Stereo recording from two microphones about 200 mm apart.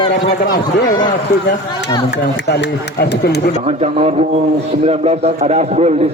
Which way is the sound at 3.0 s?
55° left (ahead or behind).